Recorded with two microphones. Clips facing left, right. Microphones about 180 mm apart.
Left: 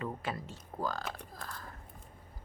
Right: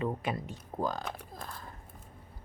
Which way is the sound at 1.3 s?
20° right (ahead or behind).